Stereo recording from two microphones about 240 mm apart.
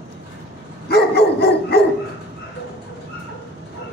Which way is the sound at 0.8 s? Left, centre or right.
Left.